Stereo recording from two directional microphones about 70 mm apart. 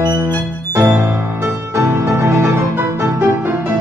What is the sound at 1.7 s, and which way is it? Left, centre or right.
Music, right.